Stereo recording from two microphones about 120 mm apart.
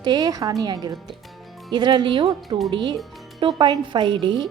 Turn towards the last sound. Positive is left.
turn(degrees=-45)  # may be behind; listen again after turning